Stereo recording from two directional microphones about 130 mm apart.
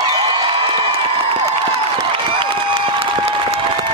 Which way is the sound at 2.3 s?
40° right (ahead or behind).